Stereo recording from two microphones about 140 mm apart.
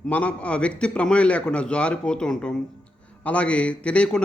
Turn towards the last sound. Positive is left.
turn(degrees=10)  # may be behind; listen again after turning